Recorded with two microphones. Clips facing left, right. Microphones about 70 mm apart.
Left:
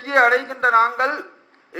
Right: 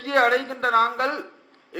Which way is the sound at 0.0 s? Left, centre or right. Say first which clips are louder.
Left 4 dB; left.